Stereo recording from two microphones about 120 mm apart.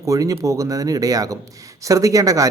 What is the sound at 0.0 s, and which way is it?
A man's voice, 30° right (ahead or behind).